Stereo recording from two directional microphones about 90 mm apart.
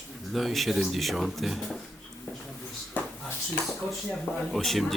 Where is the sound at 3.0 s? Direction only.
20° left (ahead or behind).